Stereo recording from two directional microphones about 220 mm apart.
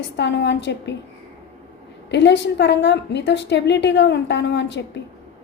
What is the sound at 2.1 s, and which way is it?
A woman's voice, 55° left (ahead or behind).